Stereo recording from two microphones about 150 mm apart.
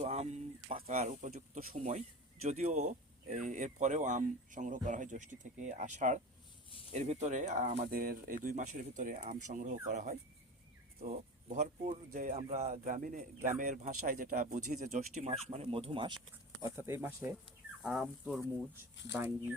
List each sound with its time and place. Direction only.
0.0 s speech: 45° right (ahead or behind)
16.6 s speech: 15° right (ahead or behind)